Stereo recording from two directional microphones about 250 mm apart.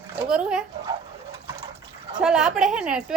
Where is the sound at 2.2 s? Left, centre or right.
Centre.